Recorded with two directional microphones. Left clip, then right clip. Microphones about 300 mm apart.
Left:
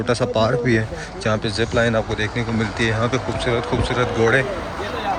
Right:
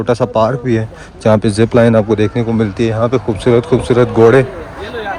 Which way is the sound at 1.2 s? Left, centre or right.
Centre.